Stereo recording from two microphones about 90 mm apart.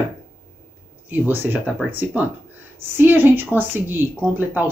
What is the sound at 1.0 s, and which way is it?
Speech, 20° right (ahead or behind).